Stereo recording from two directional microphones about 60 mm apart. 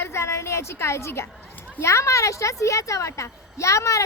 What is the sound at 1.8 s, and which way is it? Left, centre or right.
A woman's voice, left.